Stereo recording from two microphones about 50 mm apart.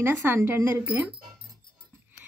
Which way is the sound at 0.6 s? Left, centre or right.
Right.